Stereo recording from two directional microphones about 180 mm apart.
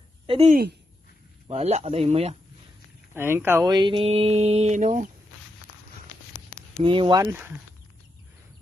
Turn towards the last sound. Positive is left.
turn(degrees=-10)  # may be behind; listen again after turning